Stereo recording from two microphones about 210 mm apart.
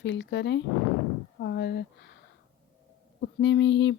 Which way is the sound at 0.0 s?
60° left (ahead or behind).